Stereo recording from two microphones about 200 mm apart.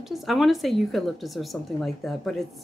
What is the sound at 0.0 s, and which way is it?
Speech, centre (ahead or behind).